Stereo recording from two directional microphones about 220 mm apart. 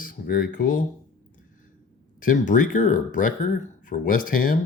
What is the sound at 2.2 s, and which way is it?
Speech, 35° left (ahead or behind).